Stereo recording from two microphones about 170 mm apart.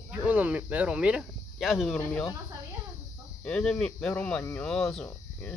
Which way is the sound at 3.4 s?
5° left (ahead or behind).